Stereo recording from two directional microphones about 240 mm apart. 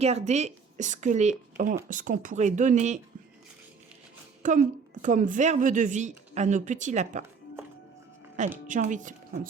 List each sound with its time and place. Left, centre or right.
0.0 s speech: right
4.4 s a woman's voice: right
8.6 s a woman's voice: right